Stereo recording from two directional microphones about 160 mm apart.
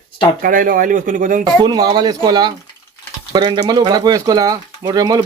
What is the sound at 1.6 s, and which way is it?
Speech, 25° right (ahead or behind).